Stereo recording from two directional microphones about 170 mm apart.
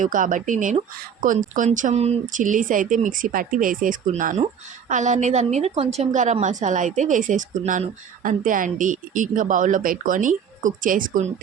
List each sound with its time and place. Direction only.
0.0 s a woman's voice: 50° right (ahead or behind)